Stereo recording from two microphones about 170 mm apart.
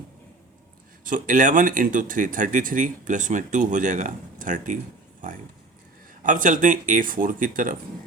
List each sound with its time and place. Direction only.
1.0 s speech: 50° right (ahead or behind)
6.2 s speech: 50° right (ahead or behind)